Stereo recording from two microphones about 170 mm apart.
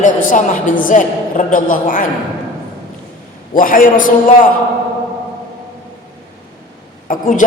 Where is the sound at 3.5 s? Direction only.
55° left (ahead or behind).